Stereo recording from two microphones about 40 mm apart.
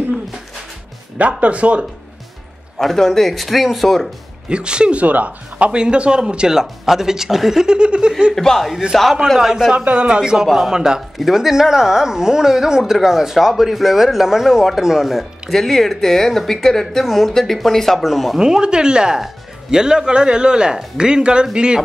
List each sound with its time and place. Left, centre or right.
1.1 s speech: right
2.8 s speech: centre
4.5 s speech: right
5.0 s speech: right
5.7 s speech: right
8.4 s speech: centre
9.4 s speech: centre
9.8 s speech: right
10.3 s speech: centre
11.0 s speech: centre
15.5 s speech: centre
18.4 s speech: centre